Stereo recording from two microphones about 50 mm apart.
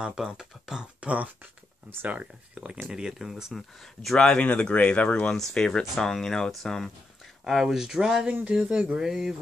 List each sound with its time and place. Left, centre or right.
0.0 s speech: centre
1.1 s speech: right
2.0 s speech: right
3.5 s speech: centre
4.2 s speech: left
7.6 s speech: centre
8.5 s speech: right
9.0 s speech: centre